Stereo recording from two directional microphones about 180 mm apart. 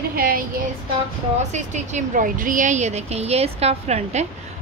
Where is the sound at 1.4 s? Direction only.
40° right (ahead or behind).